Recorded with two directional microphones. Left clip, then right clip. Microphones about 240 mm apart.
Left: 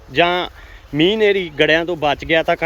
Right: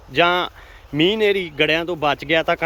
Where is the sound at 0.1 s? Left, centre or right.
Centre.